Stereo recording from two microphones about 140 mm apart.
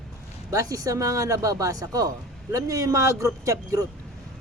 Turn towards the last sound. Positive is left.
turn(degrees=-25)  # may be behind; listen again after turning